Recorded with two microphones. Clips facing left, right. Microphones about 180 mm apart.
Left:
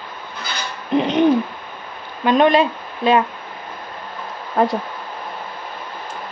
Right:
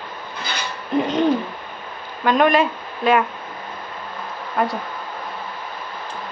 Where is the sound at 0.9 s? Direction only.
20° left (ahead or behind).